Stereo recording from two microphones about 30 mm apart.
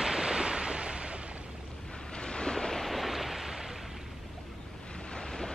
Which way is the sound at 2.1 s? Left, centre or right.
Left.